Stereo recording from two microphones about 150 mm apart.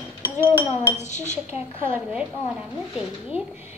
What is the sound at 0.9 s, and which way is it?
Speech, 50° left (ahead or behind).